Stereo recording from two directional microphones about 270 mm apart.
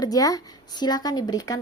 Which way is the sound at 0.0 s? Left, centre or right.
Centre.